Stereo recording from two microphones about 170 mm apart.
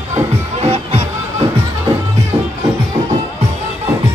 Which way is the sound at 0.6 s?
35° right (ahead or behind).